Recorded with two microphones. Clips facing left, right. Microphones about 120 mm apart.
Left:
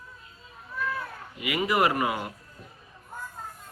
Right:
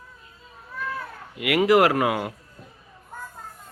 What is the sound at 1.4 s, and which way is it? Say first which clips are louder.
Speech: right 7 dB; 85° right.